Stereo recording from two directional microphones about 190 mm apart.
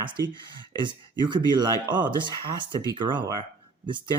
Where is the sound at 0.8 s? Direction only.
25° right (ahead or behind).